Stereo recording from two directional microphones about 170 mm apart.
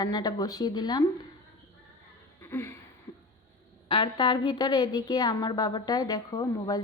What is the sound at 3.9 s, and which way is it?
A woman's voice, 30° left (ahead or behind).